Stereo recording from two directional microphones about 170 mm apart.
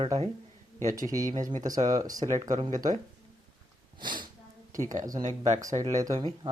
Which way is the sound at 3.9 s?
25° right (ahead or behind).